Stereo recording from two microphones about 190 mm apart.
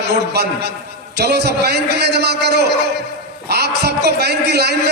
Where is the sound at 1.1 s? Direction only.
60° right (ahead or behind).